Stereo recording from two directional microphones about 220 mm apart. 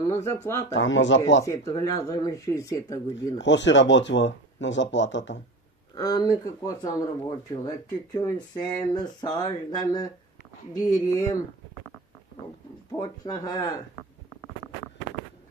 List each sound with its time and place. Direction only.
0.0 s speech: 10° left (ahead or behind)
0.7 s speech: 60° left (ahead or behind)
1.4 s speech: 15° left (ahead or behind)
3.3 s speech: 55° left (ahead or behind)
5.9 s speech: 15° left (ahead or behind)
13.0 s speech: 15° left (ahead or behind)